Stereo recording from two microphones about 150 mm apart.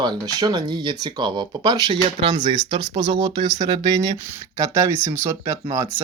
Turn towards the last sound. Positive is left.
turn(degrees=-20)  # may be behind; listen again after turning